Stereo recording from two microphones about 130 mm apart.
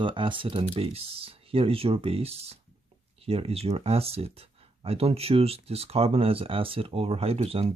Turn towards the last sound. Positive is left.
turn(degrees=-50)  # may be behind; listen again after turning